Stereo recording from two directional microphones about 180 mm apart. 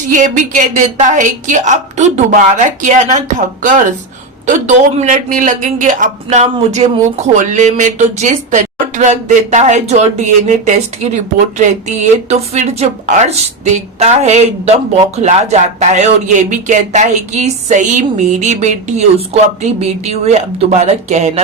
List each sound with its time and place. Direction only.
0.1 s a woman's voice: 45° right (ahead or behind)